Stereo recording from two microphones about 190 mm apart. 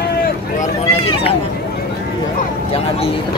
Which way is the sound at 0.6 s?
30° left (ahead or behind).